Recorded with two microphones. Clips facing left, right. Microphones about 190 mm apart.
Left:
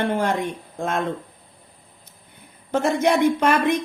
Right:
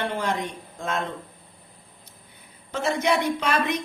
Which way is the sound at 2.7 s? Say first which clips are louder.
Left 4 dB; 55° left (ahead or behind).